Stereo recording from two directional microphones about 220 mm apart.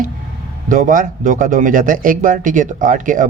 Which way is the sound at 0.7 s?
40° right (ahead or behind).